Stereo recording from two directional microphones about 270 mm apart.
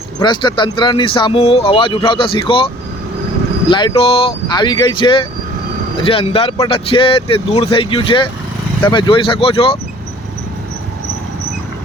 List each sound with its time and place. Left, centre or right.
0.2 s speech: centre
3.7 s speech: centre